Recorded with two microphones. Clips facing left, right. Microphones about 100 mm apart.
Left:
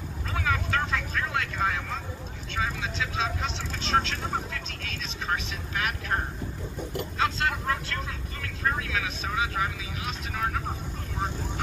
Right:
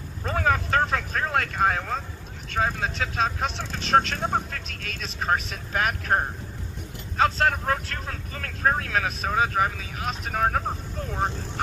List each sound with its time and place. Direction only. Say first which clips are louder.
0.3 s vehicle: right 5 dB; 50° right (ahead or behind)
2.5 s speech: right 5 dB; 50° right (ahead or behind)